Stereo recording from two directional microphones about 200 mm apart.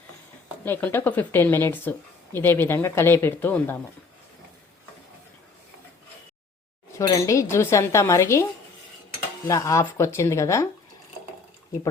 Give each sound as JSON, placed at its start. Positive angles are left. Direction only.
{"t": 0.6, "sound": "speech", "side_deg": 10}
{"t": 7.1, "sound": "speech", "side_deg": 15}
{"t": 9.5, "sound": "speech", "side_deg": 15}